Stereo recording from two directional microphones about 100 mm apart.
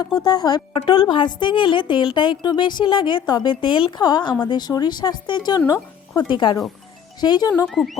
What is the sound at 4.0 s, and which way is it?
Speech, 45° left (ahead or behind).